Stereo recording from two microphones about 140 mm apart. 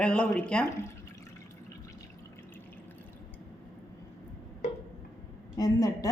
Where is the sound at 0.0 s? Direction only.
5° left (ahead or behind).